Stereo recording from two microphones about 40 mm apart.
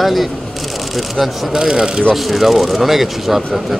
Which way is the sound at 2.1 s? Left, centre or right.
Centre.